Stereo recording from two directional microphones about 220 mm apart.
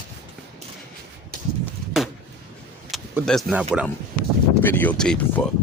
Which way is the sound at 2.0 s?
Centre (ahead or behind).